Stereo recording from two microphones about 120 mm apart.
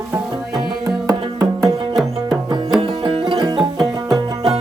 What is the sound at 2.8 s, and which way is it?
Music, 45° right (ahead or behind).